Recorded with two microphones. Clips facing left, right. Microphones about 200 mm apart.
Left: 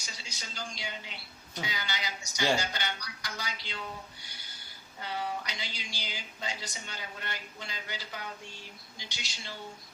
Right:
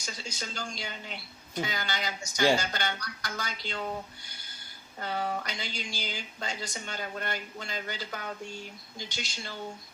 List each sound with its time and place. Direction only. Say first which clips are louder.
0.0 s speech: right 7 dB; 45° right (ahead or behind)
4.9 s speech: right 3 dB; 50° right (ahead or behind)